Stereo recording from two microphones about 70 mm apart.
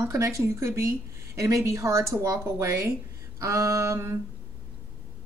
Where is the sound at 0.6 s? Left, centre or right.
Right.